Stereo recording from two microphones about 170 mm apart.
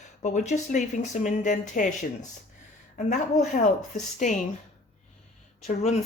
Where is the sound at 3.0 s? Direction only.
45° left (ahead or behind).